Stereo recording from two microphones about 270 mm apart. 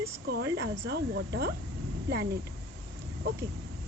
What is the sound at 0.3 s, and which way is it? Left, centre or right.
Speech, right.